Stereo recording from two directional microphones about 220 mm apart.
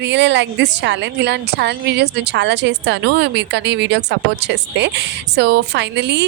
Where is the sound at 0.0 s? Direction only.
50° right (ahead or behind).